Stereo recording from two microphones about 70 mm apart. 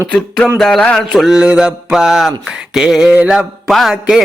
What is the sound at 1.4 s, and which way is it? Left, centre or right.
Mantra, centre.